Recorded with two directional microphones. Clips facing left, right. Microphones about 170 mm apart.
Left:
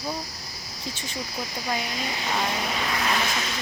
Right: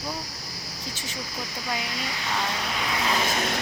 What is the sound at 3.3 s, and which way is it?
Vehicle, 50° right (ahead or behind).